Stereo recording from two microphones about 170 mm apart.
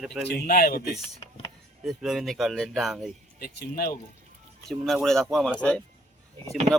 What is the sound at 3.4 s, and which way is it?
Speech, 60° left (ahead or behind).